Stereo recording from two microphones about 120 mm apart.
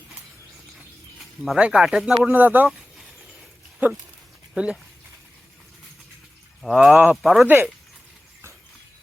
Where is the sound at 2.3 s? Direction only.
15° right (ahead or behind).